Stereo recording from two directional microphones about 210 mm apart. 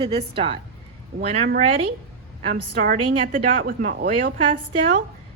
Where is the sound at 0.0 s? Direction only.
25° right (ahead or behind).